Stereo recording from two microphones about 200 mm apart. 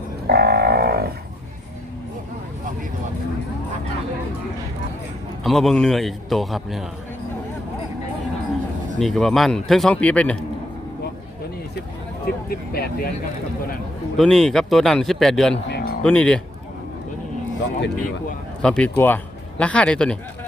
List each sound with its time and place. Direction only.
0.3 s a sound: 50° right (ahead or behind)
5.4 s a man's voice: centre (ahead or behind)
9.0 s a man's voice: centre (ahead or behind)
12.2 s speech: 50° left (ahead or behind)
14.2 s a man's voice: 5° left (ahead or behind)
15.7 s a sound: 50° left (ahead or behind)
16.0 s a man's voice: 5° left (ahead or behind)
17.6 s speech: 60° left (ahead or behind)
18.6 s a man's voice: 5° left (ahead or behind)